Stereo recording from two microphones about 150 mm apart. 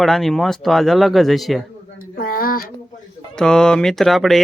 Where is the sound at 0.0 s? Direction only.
Centre (ahead or behind).